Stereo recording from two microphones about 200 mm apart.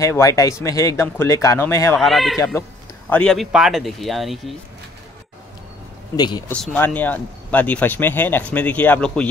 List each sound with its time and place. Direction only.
0.0 s speech: 15° left (ahead or behind)
2.0 s speech: centre (ahead or behind)
2.3 s speech: 15° left (ahead or behind)
6.1 s speech: 20° left (ahead or behind)
6.5 s speech: 5° left (ahead or behind)